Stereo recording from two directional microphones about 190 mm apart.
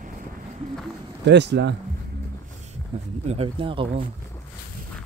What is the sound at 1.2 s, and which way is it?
Speech, 65° right (ahead or behind).